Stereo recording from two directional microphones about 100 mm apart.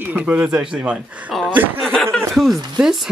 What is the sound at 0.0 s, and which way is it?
Speech, 15° right (ahead or behind).